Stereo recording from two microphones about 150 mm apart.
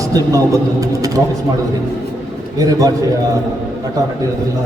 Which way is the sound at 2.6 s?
25° right (ahead or behind).